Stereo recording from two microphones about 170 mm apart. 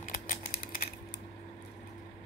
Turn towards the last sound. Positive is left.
turn(degrees=55)  # may be behind; listen again after turning